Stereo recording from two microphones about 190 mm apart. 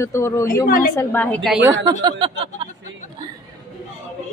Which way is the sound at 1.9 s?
25° right (ahead or behind).